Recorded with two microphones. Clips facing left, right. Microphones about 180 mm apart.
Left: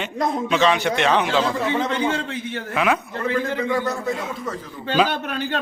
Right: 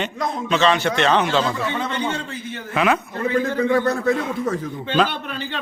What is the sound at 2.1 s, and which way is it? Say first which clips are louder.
Speech: left 2 dB; 90° left.